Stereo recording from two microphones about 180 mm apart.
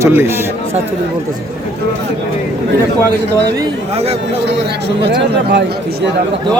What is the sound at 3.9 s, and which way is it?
Speech, 35° right (ahead or behind).